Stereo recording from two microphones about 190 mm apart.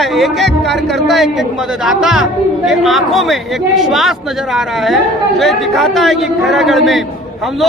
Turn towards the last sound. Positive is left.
turn(degrees=0)  # may be behind; listen again after turning